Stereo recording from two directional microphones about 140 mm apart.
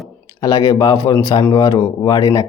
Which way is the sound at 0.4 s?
25° left (ahead or behind).